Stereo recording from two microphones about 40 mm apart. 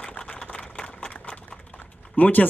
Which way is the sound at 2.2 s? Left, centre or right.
Left.